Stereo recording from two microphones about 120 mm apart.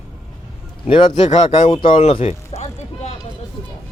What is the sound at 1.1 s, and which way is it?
Speech, 70° left (ahead or behind).